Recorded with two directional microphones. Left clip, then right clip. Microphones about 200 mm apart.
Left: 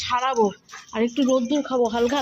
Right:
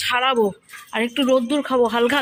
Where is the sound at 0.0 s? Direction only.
Centre (ahead or behind).